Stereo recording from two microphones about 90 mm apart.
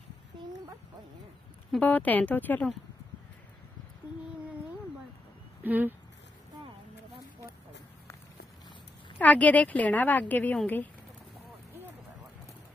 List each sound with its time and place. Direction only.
1.8 s speech: 20° left (ahead or behind)
5.6 s speech: 20° right (ahead or behind)
9.2 s a woman's voice: 15° left (ahead or behind)